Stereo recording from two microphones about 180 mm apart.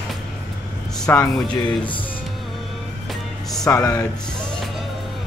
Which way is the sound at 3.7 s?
15° left (ahead or behind).